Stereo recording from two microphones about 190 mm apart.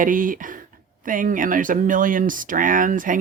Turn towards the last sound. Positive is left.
turn(degrees=-45)  # may be behind; listen again after turning